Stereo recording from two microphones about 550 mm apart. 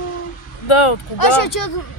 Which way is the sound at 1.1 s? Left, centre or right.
Left.